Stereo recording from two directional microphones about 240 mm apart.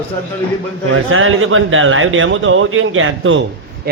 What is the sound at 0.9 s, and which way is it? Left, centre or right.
A man's voice, right.